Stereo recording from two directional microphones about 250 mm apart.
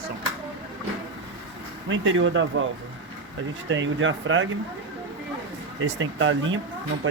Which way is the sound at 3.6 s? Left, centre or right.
Right.